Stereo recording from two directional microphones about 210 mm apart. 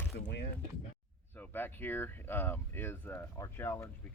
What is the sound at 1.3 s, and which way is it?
Speech, 10° left (ahead or behind).